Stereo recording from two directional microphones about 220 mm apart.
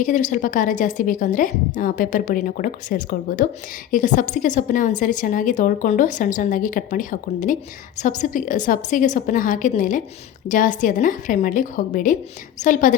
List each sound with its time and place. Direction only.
0.0 s a woman's voice: 35° left (ahead or behind)